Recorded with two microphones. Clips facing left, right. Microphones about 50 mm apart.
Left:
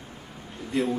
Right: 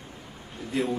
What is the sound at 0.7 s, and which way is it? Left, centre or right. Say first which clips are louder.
Speech: left 2 dB; centre.